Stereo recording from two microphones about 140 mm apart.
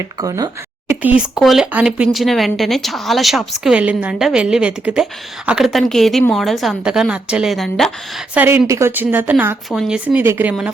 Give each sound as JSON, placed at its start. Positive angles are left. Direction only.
{"t": 0.2, "sound": "a sound", "side_deg": -25}
{"t": 1.0, "sound": "speech", "side_deg": -5}
{"t": 8.4, "sound": "speech", "side_deg": -15}